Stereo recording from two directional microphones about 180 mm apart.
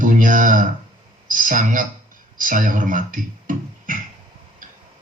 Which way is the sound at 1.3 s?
45° right (ahead or behind).